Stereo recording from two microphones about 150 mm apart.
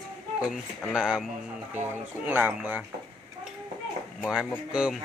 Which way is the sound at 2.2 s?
10° right (ahead or behind).